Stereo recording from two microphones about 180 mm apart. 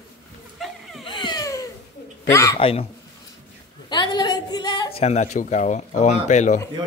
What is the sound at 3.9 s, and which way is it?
Speech, 25° left (ahead or behind).